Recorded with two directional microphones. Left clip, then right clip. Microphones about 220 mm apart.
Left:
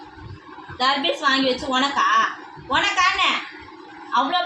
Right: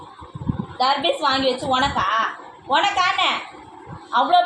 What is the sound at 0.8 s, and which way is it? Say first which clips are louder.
A woman's voice: right 1 dB; 35° left (ahead or behind).